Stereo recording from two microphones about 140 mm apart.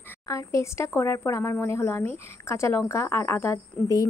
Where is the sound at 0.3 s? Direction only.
20° left (ahead or behind).